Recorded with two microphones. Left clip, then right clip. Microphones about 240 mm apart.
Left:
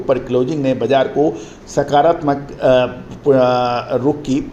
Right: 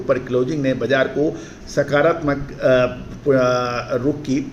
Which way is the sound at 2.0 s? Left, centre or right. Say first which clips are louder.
Left 4 dB; left.